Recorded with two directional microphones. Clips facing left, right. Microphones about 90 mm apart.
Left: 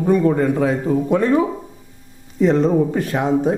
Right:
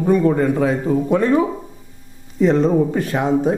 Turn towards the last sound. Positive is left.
turn(degrees=-25)  # may be behind; listen again after turning